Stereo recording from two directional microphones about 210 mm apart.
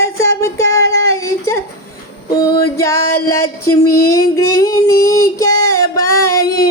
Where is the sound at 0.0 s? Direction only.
15° left (ahead or behind).